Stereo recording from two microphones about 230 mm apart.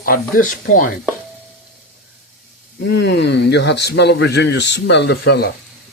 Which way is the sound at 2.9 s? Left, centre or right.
Left.